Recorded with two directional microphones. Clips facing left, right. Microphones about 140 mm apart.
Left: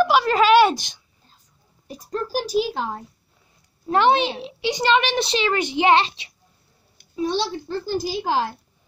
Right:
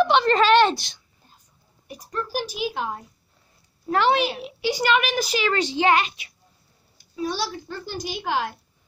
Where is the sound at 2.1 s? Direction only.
35° left (ahead or behind).